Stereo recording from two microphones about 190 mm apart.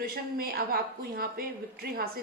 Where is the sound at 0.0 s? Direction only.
50° right (ahead or behind).